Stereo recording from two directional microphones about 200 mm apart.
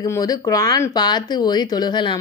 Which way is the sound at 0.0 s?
20° left (ahead or behind).